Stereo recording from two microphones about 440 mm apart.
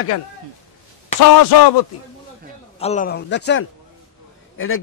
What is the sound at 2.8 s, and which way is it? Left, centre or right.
A man's voice, centre.